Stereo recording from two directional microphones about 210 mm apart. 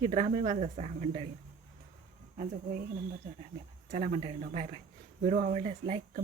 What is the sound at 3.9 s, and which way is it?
Speech, 35° right (ahead or behind).